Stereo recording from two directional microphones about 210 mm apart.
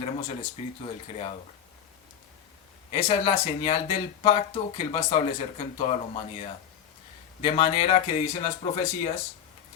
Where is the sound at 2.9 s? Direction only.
30° left (ahead or behind).